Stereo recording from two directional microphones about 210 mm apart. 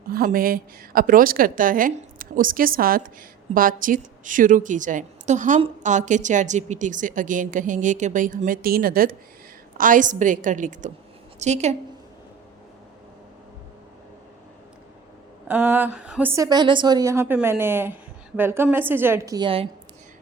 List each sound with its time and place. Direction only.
0.1 s a woman's voice: 45° right (ahead or behind)
15.4 s a woman's voice: 10° right (ahead or behind)